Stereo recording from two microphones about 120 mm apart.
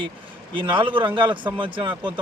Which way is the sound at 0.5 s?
45° right (ahead or behind).